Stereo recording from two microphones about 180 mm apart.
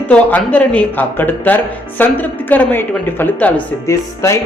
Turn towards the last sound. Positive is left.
turn(degrees=15)  # may be behind; listen again after turning